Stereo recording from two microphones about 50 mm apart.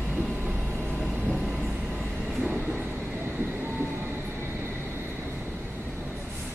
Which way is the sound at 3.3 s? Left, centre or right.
Right.